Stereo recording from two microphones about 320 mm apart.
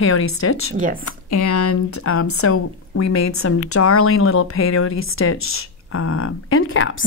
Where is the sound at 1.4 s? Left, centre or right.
Left.